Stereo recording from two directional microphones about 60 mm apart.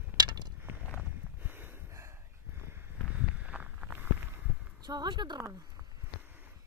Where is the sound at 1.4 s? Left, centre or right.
Right.